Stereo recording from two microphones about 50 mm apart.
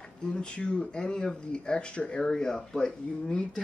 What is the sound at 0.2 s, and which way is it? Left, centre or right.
Speech, centre.